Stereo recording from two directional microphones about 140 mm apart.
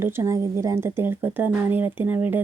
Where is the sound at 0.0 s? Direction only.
20° right (ahead or behind).